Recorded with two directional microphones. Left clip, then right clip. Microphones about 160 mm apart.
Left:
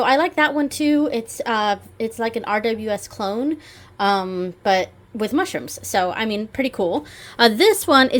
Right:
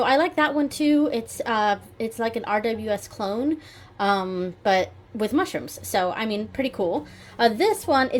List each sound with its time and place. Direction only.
0.0 s a woman's voice: 15° left (ahead or behind); by 8.1 s 40° left (ahead or behind)